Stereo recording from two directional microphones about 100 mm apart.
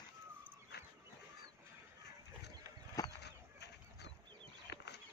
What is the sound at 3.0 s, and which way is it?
Chicken, 35° left (ahead or behind).